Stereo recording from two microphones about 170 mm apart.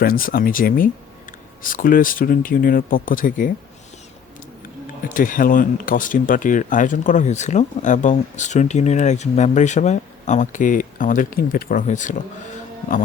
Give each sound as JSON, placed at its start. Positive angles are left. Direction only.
{"t": 0.0, "sound": "speech", "side_deg": 55}
{"t": 5.0, "sound": "speech", "side_deg": 55}